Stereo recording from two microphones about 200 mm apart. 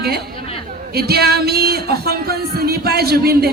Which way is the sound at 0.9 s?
50° right (ahead or behind).